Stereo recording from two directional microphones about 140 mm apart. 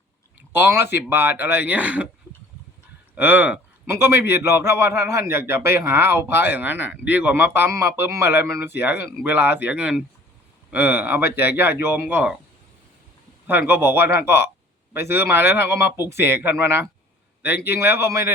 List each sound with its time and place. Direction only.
0.5 s speech: 15° right (ahead or behind)
3.2 s speech: 15° right (ahead or behind)
13.5 s speech: 15° right (ahead or behind)